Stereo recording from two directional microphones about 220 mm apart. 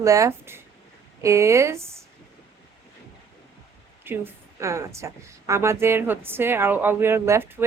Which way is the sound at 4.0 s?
10° right (ahead or behind).